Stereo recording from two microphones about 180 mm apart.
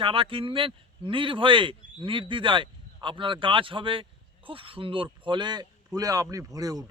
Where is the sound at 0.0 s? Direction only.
30° right (ahead or behind).